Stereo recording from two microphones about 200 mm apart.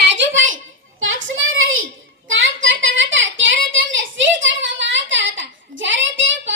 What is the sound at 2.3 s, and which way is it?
Child singing, 70° right (ahead or behind).